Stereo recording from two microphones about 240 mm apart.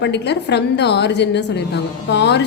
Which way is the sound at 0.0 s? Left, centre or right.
Left.